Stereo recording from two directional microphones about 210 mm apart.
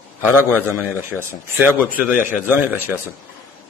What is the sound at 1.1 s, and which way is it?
A man's voice, centre (ahead or behind).